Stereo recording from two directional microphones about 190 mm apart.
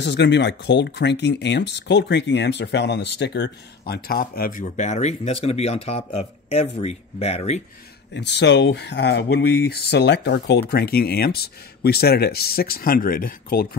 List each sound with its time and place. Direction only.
0.0 s speech: 65° left (ahead or behind); by 7.6 s 35° left (ahead or behind)
8.1 s speech: 65° left (ahead or behind)